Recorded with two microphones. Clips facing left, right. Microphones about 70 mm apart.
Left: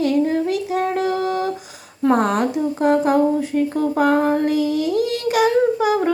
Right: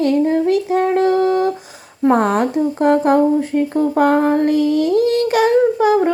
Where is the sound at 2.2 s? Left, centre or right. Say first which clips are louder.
Right 3 dB; right.